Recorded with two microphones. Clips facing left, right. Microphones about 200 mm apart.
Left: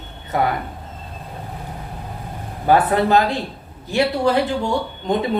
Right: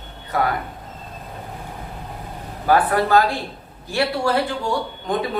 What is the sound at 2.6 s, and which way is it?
Speech, 20° left (ahead or behind).